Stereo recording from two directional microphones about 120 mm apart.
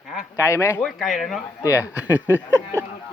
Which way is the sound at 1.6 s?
25° left (ahead or behind).